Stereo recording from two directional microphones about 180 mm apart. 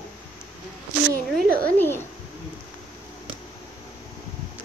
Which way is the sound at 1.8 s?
10° left (ahead or behind).